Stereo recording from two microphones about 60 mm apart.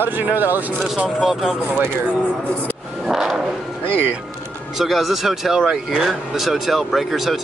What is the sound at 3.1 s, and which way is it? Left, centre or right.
Vehicle, centre.